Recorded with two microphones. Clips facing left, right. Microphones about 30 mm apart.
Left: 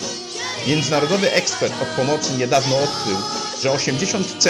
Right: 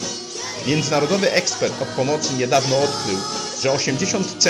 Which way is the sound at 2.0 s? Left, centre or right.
Left.